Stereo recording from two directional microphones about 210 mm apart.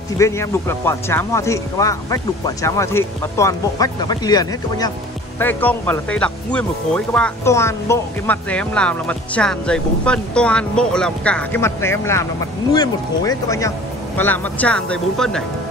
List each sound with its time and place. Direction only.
0.2 s speech: 15° left (ahead or behind)